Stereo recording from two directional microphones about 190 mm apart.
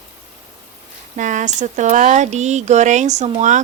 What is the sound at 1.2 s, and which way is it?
Speech, 40° right (ahead or behind).